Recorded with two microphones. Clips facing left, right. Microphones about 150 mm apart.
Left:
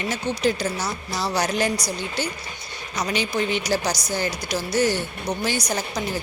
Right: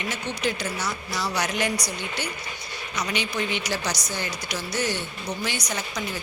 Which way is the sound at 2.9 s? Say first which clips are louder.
Left 4 dB; 35° left (ahead or behind).